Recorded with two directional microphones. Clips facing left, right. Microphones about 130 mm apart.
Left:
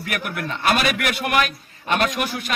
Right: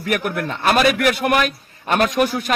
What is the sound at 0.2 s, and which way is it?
A man's voice, 40° right (ahead or behind).